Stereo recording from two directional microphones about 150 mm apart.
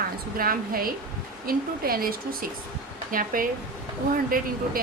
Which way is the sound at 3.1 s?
65° right (ahead or behind).